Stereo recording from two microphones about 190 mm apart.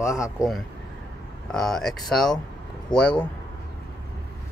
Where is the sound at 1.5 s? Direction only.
Centre (ahead or behind).